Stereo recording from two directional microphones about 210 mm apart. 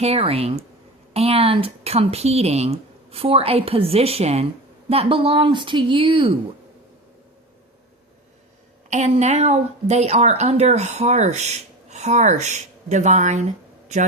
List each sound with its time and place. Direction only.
0.0 s speech: 30° right (ahead or behind)
8.9 s a woman's voice: 35° right (ahead or behind)